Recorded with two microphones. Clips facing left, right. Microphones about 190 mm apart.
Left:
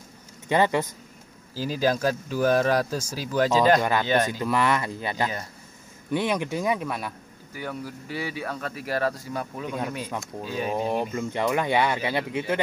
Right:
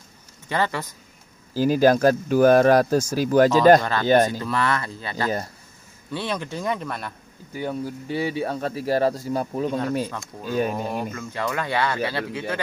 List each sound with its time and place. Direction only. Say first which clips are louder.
0.5 s speech: left 3 dB; 20° left (ahead or behind)
1.5 s speech: right 7 dB; 55° right (ahead or behind)
3.8 s speech: right 4 dB; 15° left (ahead or behind)
7.5 s speech: right 6 dB; 25° right (ahead or behind)
10.4 s speech: right 7 dB; 45° right (ahead or behind)
10.9 s speech: left 3 dB; 20° left (ahead or behind)